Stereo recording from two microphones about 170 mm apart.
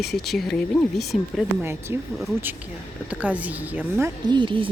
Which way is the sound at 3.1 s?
10° right (ahead or behind).